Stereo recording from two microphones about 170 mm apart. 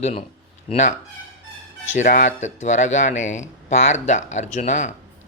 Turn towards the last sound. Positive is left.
turn(degrees=45)  # may be behind; listen again after turning